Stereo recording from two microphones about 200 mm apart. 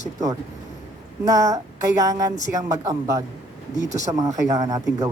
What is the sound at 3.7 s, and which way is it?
Speech, 40° left (ahead or behind).